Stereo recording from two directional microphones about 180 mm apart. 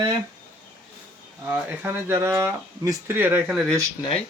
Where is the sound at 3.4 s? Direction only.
Centre (ahead or behind).